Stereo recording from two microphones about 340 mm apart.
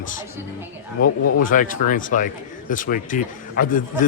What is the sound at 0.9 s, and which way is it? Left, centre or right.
Speech, left.